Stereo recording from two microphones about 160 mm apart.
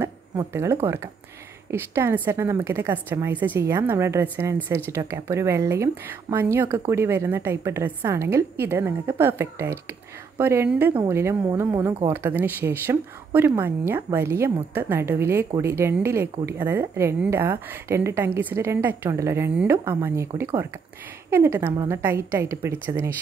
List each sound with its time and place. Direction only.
0.0 s a sound: 15° right (ahead or behind)
0.8 s speech: 15° right (ahead or behind)
21.3 s speech: 15° right (ahead or behind)